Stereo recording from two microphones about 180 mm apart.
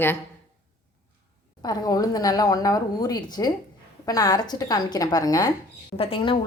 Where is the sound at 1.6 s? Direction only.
20° left (ahead or behind).